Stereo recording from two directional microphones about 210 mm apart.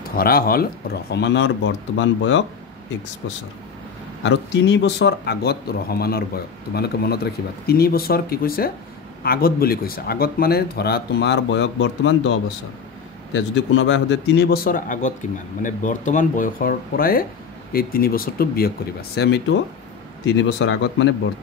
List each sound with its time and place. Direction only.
0.1 s speech: 45° left (ahead or behind); by 2.4 s 60° left (ahead or behind)
4.2 s speech: 55° left (ahead or behind)